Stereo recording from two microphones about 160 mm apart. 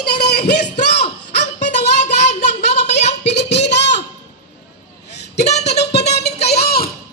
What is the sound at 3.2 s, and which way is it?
Child singing, 90° left.